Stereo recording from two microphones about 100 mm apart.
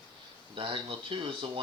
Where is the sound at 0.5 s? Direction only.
60° right (ahead or behind).